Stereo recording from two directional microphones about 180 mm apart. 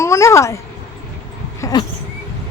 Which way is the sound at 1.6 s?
20° left (ahead or behind).